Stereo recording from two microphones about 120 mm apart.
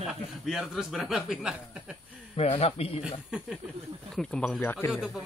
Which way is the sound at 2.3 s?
55° left (ahead or behind).